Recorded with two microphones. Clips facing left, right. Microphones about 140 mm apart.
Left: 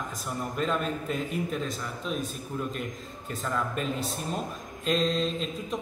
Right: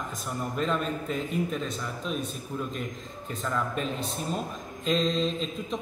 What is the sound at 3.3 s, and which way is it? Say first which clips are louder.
A man's voice: even; centre (ahead or behind).